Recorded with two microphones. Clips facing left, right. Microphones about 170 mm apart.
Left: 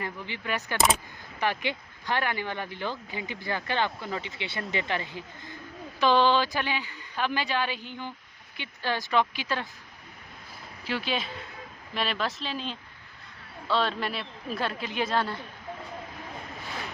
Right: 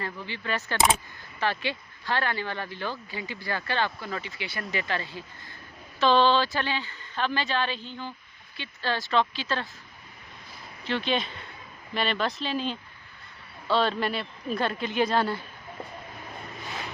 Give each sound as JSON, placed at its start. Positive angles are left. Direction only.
{"t": 0.0, "sound": "a woman's voice", "side_deg": 15}
{"t": 10.8, "sound": "speech", "side_deg": 5}